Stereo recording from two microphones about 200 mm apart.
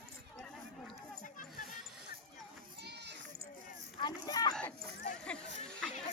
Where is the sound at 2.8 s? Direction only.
60° right (ahead or behind).